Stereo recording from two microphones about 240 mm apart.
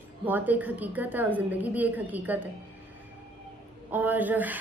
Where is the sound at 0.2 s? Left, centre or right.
Centre.